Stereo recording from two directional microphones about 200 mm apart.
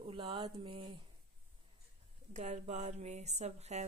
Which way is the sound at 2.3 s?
35° right (ahead or behind).